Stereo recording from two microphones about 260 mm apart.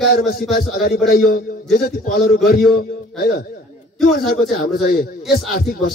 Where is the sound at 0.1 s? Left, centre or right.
Left.